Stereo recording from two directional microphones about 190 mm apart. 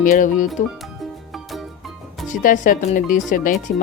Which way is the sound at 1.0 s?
Centre (ahead or behind).